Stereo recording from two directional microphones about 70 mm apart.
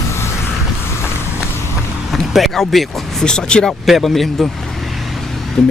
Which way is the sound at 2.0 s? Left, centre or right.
Centre.